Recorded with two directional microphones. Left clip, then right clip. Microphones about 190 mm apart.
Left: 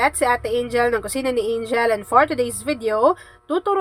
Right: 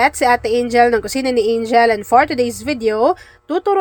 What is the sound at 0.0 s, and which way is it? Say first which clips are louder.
Speech: right 5 dB; 25° right (ahead or behind).